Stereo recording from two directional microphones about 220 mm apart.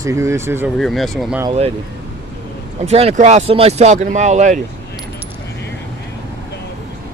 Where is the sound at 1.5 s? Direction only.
25° right (ahead or behind).